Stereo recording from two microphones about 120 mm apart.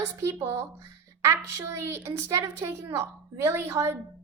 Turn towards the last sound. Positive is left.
turn(degrees=-25)  # may be behind; listen again after turning